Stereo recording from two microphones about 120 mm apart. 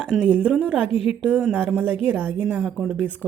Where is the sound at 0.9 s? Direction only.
50° left (ahead or behind).